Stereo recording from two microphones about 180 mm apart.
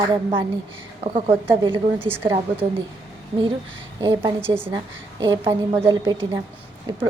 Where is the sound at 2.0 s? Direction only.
10° right (ahead or behind).